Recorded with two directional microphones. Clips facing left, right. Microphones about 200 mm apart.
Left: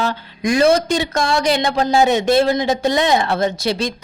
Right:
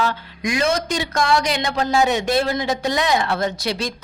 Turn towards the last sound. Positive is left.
turn(degrees=25)  # may be behind; listen again after turning